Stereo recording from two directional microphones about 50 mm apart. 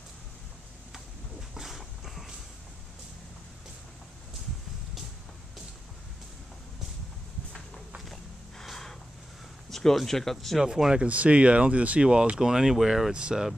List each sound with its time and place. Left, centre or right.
1.5 s dog: centre
8.1 s snort: centre
9.7 s speech: centre
10.6 s speech: centre
11.1 s speech: right; by 13.1 s centre
13.1 s speech: centre